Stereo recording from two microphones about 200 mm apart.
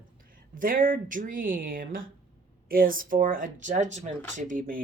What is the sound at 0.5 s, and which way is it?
Speech, 45° right (ahead or behind).